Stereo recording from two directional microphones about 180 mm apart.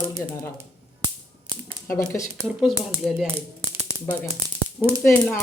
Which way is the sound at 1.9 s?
15° left (ahead or behind).